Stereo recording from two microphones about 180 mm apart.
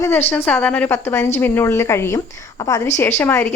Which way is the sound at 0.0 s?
15° left (ahead or behind).